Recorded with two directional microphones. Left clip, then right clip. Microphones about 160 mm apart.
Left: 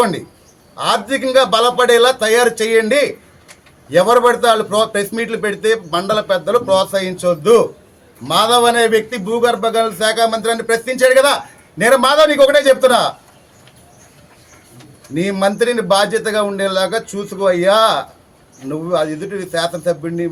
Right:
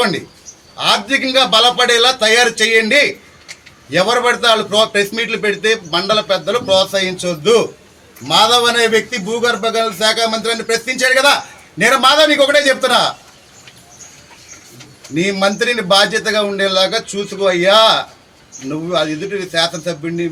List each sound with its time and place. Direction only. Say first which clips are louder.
0.8 s a man's voice: right 2 dB; 5° left (ahead or behind)
15.1 s a man's voice: right 1 dB; 5° left (ahead or behind)